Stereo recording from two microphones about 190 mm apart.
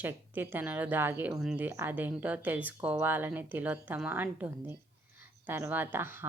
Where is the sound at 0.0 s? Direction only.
10° right (ahead or behind).